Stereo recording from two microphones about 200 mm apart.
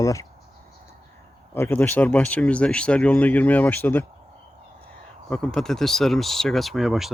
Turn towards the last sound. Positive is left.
turn(degrees=0)  # may be behind; listen again after turning